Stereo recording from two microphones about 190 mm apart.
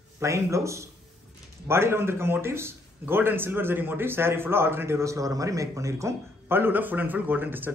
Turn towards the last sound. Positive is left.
turn(degrees=-10)  # may be behind; listen again after turning